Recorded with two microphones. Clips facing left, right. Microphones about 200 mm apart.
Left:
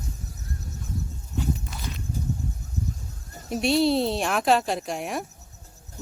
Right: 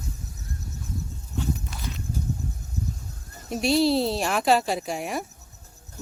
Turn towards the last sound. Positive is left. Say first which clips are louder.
# even
turn(degrees=0)  # may be behind; listen again after turning